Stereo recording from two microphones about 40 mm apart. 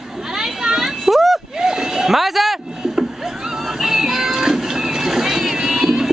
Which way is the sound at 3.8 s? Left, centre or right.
Centre.